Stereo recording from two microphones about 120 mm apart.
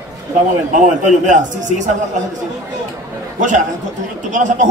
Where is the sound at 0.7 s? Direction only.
90° right.